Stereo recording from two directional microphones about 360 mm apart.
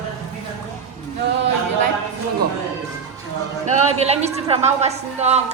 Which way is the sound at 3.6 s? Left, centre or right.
Centre.